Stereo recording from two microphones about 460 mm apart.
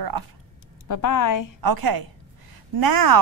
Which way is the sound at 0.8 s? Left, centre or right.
Left.